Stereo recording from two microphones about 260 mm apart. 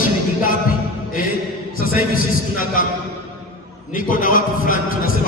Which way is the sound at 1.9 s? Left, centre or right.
Left.